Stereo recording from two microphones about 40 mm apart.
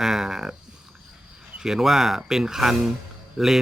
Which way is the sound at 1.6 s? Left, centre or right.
Centre.